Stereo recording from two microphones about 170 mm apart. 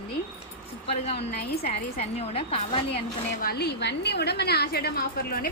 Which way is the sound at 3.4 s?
70° left (ahead or behind).